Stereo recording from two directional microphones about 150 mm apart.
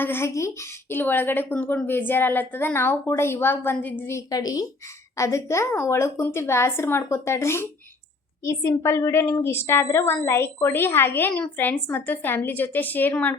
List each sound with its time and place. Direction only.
0.0 s a woman's voice: 15° left (ahead or behind)